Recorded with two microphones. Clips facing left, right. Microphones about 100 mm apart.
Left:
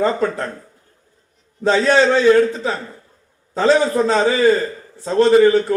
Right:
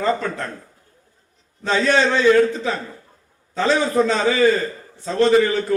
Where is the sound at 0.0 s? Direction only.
35° left (ahead or behind).